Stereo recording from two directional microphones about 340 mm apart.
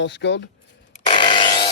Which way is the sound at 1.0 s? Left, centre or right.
Centre.